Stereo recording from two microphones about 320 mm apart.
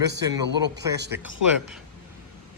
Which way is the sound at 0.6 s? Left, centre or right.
Right.